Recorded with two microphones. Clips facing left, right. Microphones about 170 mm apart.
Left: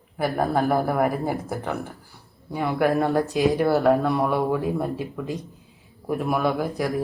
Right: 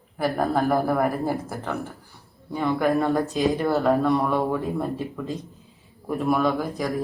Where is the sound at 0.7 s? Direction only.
15° left (ahead or behind).